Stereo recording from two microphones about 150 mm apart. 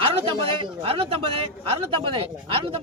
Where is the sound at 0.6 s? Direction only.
40° right (ahead or behind).